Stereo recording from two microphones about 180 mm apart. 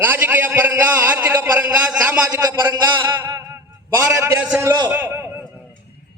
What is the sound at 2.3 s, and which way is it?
A man's voice, 20° right (ahead or behind).